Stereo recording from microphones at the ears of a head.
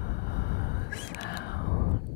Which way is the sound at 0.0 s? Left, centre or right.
Left.